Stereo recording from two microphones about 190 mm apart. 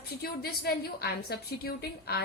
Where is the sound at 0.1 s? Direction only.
55° left (ahead or behind).